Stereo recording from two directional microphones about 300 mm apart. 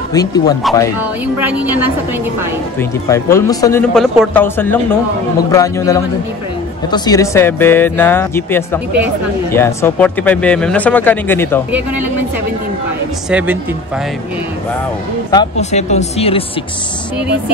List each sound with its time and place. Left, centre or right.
0.1 s speech: centre
1.2 s speech: centre
2.8 s speech: centre
13.3 s speech: centre
15.3 s speech: left